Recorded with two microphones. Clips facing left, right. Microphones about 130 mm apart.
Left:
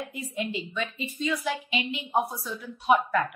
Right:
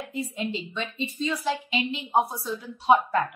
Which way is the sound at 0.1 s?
30° right (ahead or behind).